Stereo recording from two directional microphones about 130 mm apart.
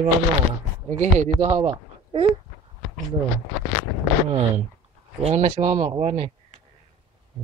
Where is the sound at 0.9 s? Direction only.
60° right (ahead or behind).